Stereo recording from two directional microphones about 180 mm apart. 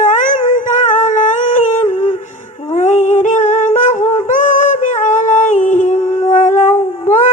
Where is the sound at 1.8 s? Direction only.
40° left (ahead or behind).